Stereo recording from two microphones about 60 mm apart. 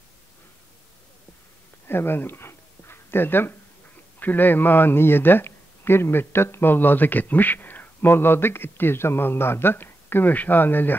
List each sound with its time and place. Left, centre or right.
1.9 s dog: left
4.2 s speech: left